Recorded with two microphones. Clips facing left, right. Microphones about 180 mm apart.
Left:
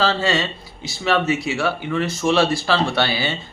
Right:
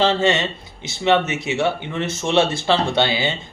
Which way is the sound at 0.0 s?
20° right (ahead or behind).